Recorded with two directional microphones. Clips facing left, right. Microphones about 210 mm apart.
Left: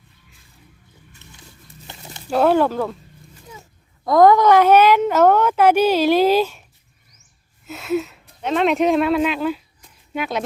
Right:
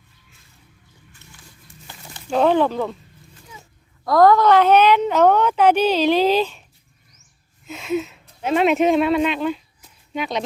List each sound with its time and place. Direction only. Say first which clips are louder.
1.9 s a sound: left 3 dB; 20° left (ahead or behind)
2.3 s a woman's voice: left 1 dB; 5° left (ahead or behind)
4.0 s a woman's voice: left 1 dB; 20° left (ahead or behind)
7.7 s speech: left 1 dB; centre (ahead or behind)